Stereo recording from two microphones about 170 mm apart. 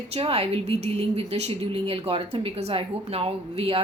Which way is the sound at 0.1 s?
35° right (ahead or behind).